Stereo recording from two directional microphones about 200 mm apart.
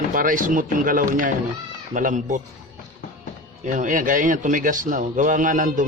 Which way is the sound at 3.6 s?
40° right (ahead or behind).